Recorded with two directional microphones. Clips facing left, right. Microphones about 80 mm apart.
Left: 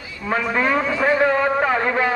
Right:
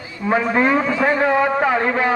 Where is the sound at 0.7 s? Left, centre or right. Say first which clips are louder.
Right 1 dB; centre.